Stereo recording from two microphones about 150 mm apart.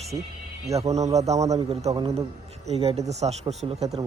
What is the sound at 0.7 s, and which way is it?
Speech, 20° right (ahead or behind).